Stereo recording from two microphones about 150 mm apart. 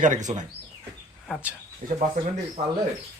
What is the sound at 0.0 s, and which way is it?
Speech, 55° right (ahead or behind).